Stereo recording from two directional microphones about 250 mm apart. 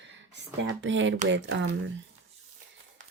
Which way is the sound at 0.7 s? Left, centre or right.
Right.